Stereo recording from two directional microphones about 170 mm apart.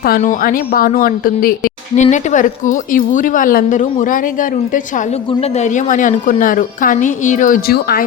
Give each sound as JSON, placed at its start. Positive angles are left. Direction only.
{"t": 0.2, "sound": "a woman's voice", "side_deg": 50}